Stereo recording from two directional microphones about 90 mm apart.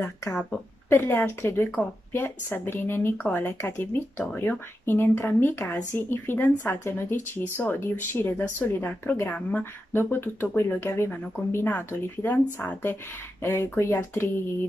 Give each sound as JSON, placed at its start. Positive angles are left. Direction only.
{"t": 0.3, "sound": "speech", "side_deg": 5}
{"t": 0.8, "sound": "speech", "side_deg": 20}